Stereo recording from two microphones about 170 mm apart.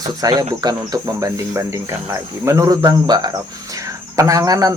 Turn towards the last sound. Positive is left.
turn(degrees=-20)  # may be behind; listen again after turning